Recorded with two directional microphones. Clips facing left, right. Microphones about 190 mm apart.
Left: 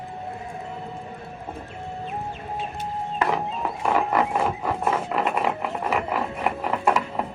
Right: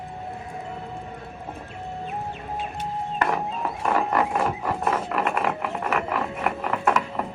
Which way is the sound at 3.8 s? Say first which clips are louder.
Left 1 dB; 10° left (ahead or behind).